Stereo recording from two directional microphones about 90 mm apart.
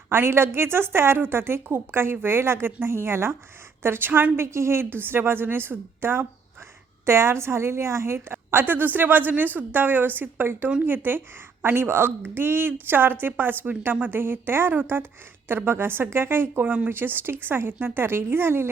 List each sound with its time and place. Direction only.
0.1 s a woman's voice: 25° right (ahead or behind)